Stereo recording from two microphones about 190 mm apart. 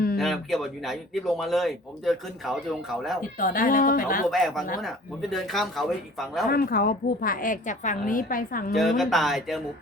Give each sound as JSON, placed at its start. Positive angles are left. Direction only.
{"t": 0.2, "sound": "speech", "side_deg": 0}
{"t": 3.2, "sound": "a woman's voice", "side_deg": 45}
{"t": 4.3, "sound": "speech", "side_deg": 0}
{"t": 6.5, "sound": "a woman's voice", "side_deg": 50}
{"t": 8.7, "sound": "speech", "side_deg": 0}